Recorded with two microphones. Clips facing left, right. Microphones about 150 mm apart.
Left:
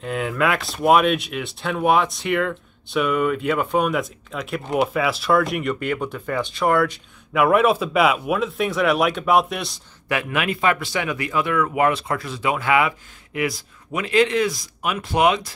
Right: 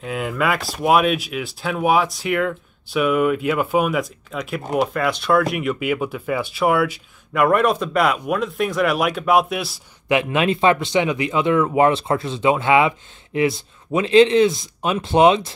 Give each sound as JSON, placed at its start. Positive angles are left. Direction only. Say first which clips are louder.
{"t": 0.0, "sound": "speech", "louder": "even", "side_deg": 0}
{"t": 10.0, "sound": "speech", "louder": "right 5 dB", "side_deg": -25}